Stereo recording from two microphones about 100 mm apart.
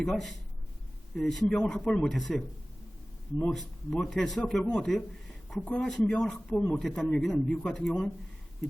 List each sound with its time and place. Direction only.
0.0 s a man's voice: 5° left (ahead or behind)
5.5 s speech: 20° left (ahead or behind)
5.8 s a man's voice: 5° left (ahead or behind)